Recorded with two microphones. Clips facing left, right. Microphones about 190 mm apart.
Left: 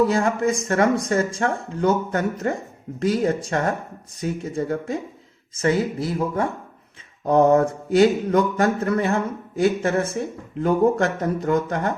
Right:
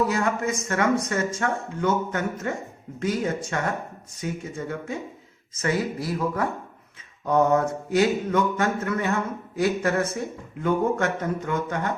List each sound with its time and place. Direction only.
0.1 s speech: 30° left (ahead or behind)